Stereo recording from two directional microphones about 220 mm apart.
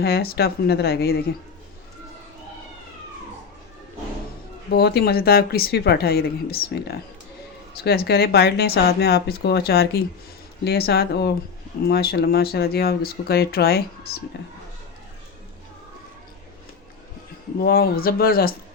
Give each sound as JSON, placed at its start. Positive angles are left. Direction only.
{"t": 0.0, "sound": "speech", "side_deg": 45}
{"t": 4.7, "sound": "speech", "side_deg": 45}
{"t": 7.9, "sound": "speech", "side_deg": 45}
{"t": 17.6, "sound": "speech", "side_deg": 45}